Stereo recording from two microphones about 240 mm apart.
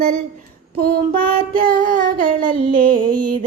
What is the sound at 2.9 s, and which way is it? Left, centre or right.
Music, right.